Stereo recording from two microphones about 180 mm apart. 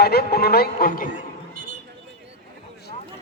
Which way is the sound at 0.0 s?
60° left (ahead or behind).